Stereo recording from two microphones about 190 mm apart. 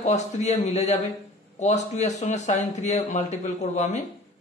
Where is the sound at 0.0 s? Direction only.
35° left (ahead or behind).